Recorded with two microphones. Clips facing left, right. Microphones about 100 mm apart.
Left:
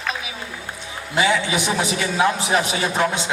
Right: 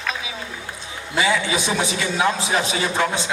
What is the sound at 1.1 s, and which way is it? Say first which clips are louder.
A man's voice: left 1 dB; 20° left (ahead or behind).